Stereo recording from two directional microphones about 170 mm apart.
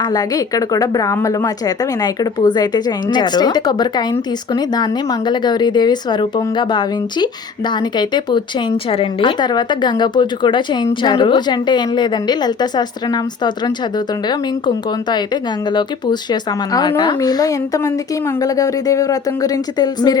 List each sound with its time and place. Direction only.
0.0 s a woman's voice: 20° left (ahead or behind)
15.1 s a woman's voice: 25° left (ahead or behind)